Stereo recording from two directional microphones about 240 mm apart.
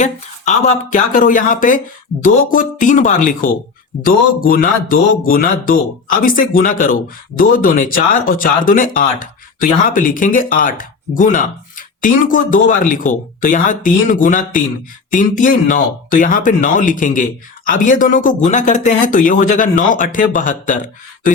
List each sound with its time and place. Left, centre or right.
0.0 s speech: left